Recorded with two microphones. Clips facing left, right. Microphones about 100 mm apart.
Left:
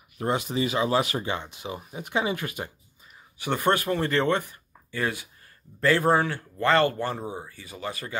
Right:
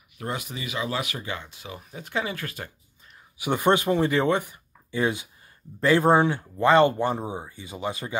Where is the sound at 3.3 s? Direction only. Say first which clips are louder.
Right 2 dB; 15° right (ahead or behind).